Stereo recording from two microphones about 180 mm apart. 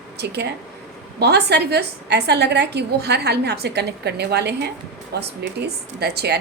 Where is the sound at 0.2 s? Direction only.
65° right (ahead or behind).